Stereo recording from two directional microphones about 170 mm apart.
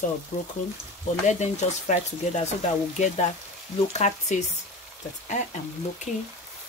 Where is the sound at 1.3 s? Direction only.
45° left (ahead or behind).